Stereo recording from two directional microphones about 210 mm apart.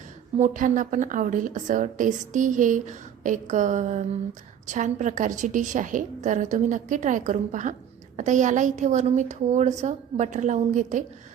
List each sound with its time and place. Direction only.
0.3 s a woman's voice: 35° right (ahead or behind)